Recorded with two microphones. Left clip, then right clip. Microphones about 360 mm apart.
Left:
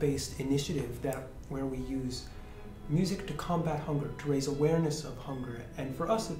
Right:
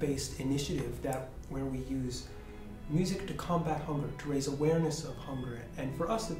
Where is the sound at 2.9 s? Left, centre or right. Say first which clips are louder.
Left 1 dB; left.